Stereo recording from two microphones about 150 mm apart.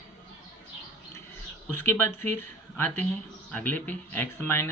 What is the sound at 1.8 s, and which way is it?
Speech, 15° left (ahead or behind).